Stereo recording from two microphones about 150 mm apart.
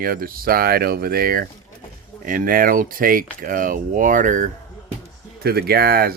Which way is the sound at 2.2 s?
70° right (ahead or behind).